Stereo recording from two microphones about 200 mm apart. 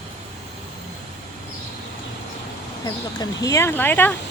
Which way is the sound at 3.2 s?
15° left (ahead or behind).